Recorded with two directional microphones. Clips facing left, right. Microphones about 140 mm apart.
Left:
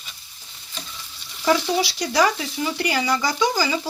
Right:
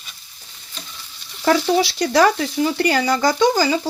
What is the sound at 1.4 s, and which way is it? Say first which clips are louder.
Speech: right 4 dB; 50° right (ahead or behind).